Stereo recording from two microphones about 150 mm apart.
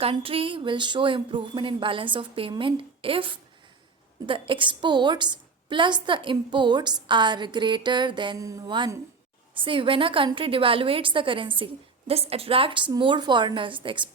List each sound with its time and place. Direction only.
0.0 s a woman's voice: 35° right (ahead or behind)